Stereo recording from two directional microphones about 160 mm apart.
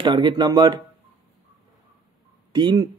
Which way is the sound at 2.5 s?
30° right (ahead or behind).